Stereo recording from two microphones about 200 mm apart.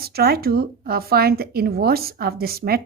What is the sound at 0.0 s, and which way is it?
Speech, 50° right (ahead or behind).